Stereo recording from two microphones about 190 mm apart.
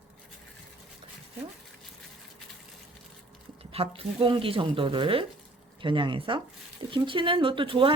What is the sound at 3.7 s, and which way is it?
Speech, 30° right (ahead or behind).